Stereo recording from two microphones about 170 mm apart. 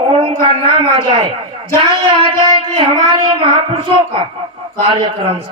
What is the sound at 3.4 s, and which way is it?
Speech, 35° right (ahead or behind).